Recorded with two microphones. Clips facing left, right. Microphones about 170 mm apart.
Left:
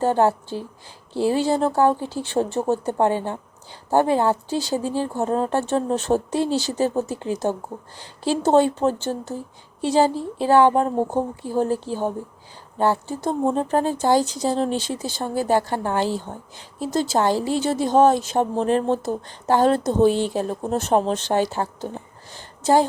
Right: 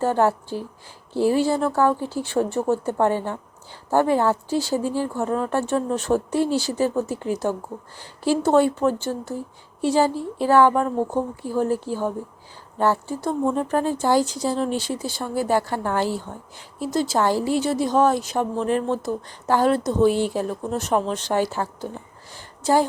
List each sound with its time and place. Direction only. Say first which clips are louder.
0.0 s speech: left 1 dB; 20° left (ahead or behind)
16.3 s speech: left 2 dB; 35° left (ahead or behind)
16.8 s a woman's voice: left 1 dB; 25° left (ahead or behind)